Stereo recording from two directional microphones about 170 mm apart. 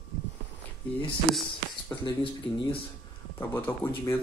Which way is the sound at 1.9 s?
30° left (ahead or behind).